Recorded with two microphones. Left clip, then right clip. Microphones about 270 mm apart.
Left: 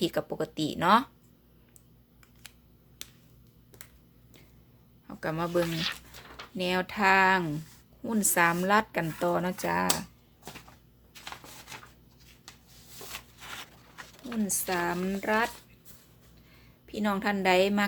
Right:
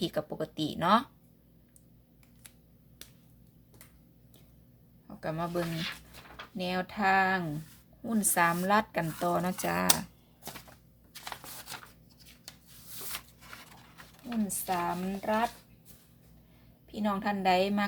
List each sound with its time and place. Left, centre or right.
0.0 s speech: centre
5.0 s speech: centre
6.6 s speech: centre
13.4 s a sound: left
14.3 s speech: centre
16.9 s speech: centre